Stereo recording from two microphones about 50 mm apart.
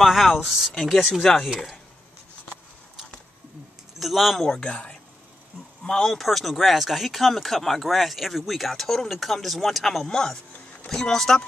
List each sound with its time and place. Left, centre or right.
0.0 s speech: centre
4.0 s speech: centre
4.5 s speech: centre
6.1 s speech: centre
10.0 s speech: centre